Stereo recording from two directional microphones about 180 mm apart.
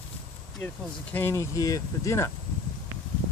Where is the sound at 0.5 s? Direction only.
10° left (ahead or behind).